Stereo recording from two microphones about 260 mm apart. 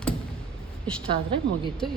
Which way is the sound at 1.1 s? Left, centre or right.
Centre.